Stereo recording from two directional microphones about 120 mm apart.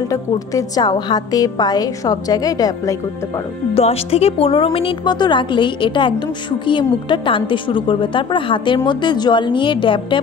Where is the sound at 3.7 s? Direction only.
55° left (ahead or behind).